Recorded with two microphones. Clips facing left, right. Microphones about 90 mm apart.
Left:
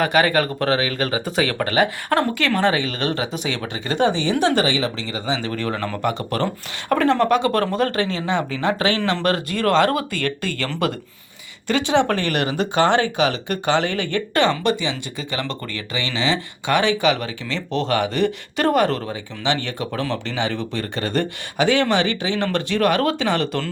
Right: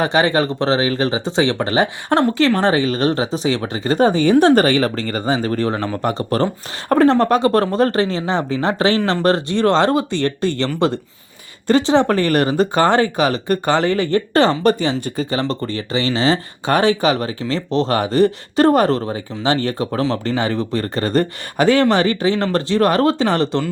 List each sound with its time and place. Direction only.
0.0 s speech: 30° right (ahead or behind)
5.7 s speech: 25° right (ahead or behind)
6.0 s speech: 35° right (ahead or behind)